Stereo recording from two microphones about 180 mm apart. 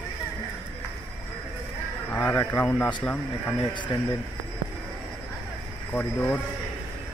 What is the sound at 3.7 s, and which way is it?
Speech, 25° left (ahead or behind).